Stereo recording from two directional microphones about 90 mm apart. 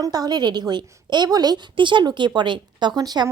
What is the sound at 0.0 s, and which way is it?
A woman's voice, 45° right (ahead or behind).